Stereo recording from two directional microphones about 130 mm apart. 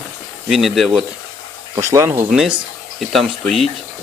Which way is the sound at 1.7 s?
20° right (ahead or behind).